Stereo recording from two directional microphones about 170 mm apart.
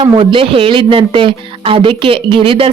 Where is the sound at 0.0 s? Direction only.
30° right (ahead or behind).